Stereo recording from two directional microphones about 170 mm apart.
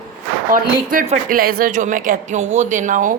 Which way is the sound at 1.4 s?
55° right (ahead or behind).